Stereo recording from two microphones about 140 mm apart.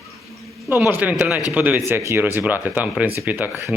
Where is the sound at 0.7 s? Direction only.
15° right (ahead or behind).